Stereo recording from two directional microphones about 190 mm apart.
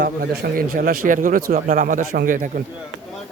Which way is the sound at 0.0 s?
55° right (ahead or behind).